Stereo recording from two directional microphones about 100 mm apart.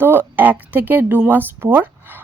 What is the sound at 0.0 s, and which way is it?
A woman's voice, 20° right (ahead or behind).